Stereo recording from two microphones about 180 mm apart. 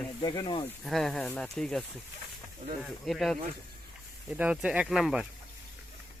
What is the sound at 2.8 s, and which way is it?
Speech, centre (ahead or behind).